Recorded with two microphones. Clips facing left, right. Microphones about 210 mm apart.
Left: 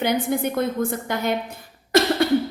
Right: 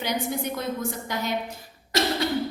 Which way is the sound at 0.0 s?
55° left (ahead or behind).